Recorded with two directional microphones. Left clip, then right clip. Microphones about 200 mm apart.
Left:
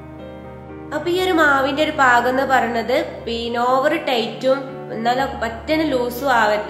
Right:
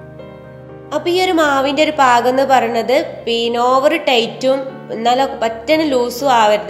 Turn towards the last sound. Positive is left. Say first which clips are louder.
# right 5 dB
turn(degrees=-25)  # may be behind; listen again after turning